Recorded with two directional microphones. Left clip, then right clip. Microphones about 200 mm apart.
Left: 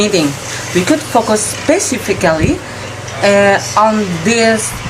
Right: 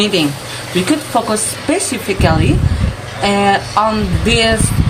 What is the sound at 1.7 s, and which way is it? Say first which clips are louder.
Speech: left 4 dB; 20° left (ahead or behind).